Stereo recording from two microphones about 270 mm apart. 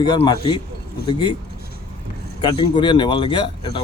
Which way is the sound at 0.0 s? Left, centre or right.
Centre.